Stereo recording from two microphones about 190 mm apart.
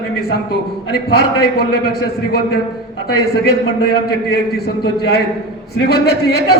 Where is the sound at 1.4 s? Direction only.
55° left (ahead or behind).